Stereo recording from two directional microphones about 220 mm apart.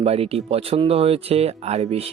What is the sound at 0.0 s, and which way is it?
Speech, 25° right (ahead or behind).